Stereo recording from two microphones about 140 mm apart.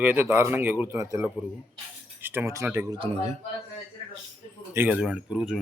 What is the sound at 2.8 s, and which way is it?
Speech, 35° right (ahead or behind).